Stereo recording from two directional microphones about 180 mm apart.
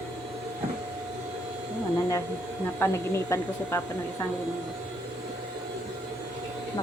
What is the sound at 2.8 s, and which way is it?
A woman's voice, 15° left (ahead or behind).